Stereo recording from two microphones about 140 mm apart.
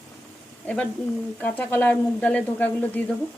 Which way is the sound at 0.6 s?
10° left (ahead or behind).